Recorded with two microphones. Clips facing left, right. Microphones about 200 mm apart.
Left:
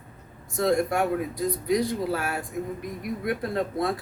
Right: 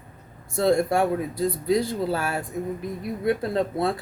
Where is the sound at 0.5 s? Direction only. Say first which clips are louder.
Right 3 dB; 30° right (ahead or behind).